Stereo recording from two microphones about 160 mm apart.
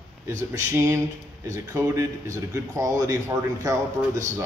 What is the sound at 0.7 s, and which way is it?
A man's voice, 20° right (ahead or behind).